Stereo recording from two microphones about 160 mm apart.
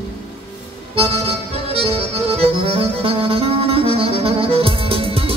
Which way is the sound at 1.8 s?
40° right (ahead or behind).